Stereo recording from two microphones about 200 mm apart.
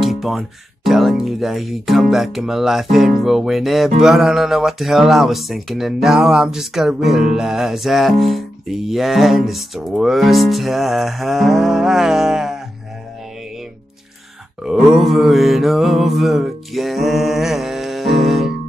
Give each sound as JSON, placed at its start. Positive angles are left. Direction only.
{"t": 0.0, "sound": "speech", "side_deg": 0}
{"t": 14.6, "sound": "mantra", "side_deg": 0}